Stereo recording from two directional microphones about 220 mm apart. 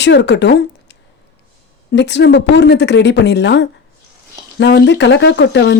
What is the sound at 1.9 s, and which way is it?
Speech, 50° left (ahead or behind).